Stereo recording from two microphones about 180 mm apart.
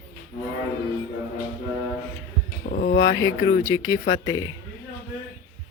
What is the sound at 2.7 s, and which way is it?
Speech, 55° left (ahead or behind).